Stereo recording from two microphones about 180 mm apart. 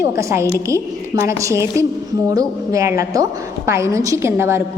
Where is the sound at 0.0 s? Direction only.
15° right (ahead or behind).